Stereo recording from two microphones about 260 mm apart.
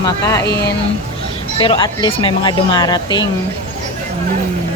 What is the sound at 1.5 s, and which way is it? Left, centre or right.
Speech, centre.